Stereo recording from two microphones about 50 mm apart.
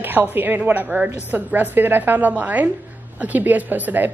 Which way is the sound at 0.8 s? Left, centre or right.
Right.